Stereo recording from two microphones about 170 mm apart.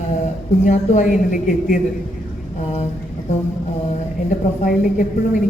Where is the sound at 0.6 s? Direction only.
45° left (ahead or behind).